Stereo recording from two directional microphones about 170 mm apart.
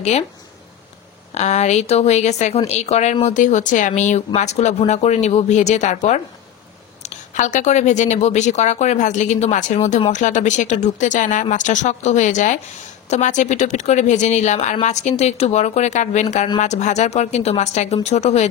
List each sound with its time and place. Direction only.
1.3 s speech: 40° left (ahead or behind)